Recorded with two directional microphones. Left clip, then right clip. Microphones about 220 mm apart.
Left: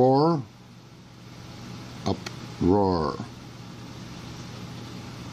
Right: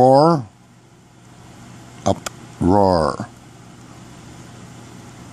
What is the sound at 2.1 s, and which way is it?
Speech, 35° right (ahead or behind).